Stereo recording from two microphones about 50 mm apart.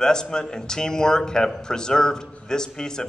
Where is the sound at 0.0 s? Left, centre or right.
Centre.